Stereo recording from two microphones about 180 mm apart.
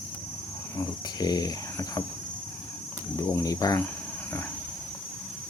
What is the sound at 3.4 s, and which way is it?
Speech, 20° left (ahead or behind).